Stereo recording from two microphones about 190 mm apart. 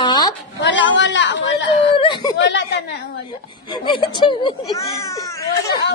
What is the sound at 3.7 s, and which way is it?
Speech, 25° left (ahead or behind).